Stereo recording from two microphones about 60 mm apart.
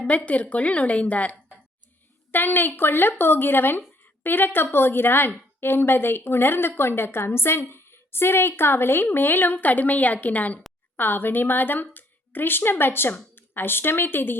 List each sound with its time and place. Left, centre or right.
0.0 s a woman's voice: left
2.3 s a woman's voice: left